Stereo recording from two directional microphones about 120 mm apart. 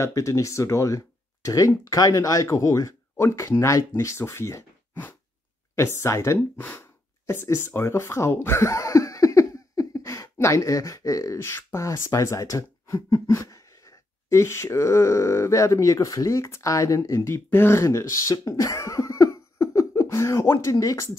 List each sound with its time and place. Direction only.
0.0 s speech: 25° left (ahead or behind)
6.5 s speech: 15° left (ahead or behind)